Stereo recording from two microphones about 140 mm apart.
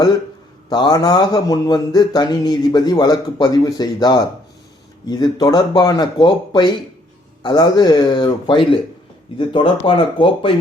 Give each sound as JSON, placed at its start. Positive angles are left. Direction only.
{"t": 0.7, "sound": "a man's voice", "side_deg": 30}